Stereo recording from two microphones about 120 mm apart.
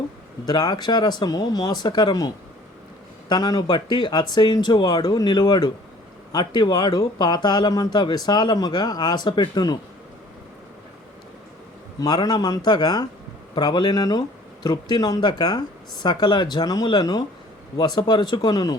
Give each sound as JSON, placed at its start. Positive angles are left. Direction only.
{"t": 0.4, "sound": "speech", "side_deg": 35}
{"t": 11.9, "sound": "speech", "side_deg": 35}